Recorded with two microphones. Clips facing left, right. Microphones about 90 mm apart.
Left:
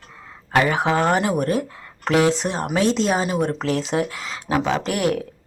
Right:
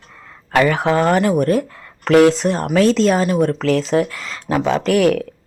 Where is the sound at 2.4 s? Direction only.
15° left (ahead or behind).